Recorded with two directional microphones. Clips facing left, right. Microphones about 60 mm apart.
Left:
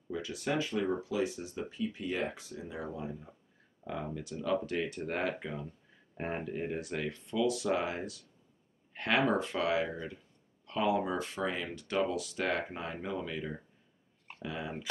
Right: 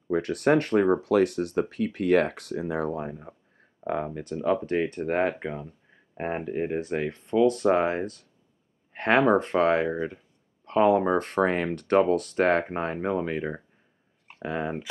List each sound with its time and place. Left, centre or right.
0.1 s speech: right
9.9 s speech: right
10.6 s speech: right